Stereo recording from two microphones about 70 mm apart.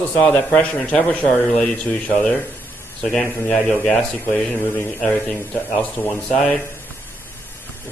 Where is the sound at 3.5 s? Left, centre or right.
Centre.